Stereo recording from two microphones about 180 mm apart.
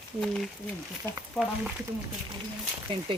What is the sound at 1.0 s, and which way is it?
Speech, 15° left (ahead or behind).